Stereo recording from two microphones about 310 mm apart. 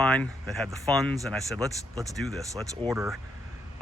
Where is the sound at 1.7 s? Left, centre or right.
Centre.